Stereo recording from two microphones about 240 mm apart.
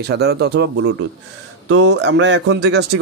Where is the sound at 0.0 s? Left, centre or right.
Right.